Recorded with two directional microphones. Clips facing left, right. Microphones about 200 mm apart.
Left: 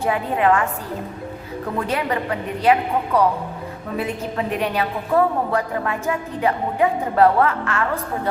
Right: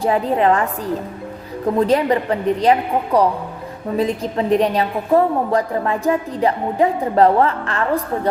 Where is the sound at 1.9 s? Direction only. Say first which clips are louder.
Right 6 dB; 35° right (ahead or behind).